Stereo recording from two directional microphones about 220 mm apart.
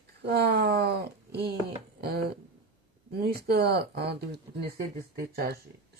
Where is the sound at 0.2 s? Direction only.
45° right (ahead or behind).